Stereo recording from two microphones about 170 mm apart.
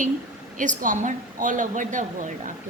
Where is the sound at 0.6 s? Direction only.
50° right (ahead or behind).